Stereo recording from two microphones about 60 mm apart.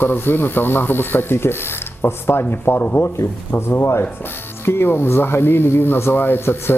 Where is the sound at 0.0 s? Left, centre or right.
Left.